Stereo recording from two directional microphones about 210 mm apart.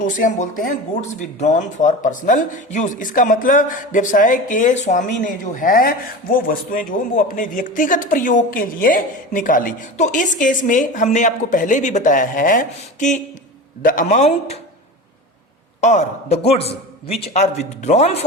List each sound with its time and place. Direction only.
0.0 s speech: 35° left (ahead or behind)
15.8 s a man's voice: 35° left (ahead or behind)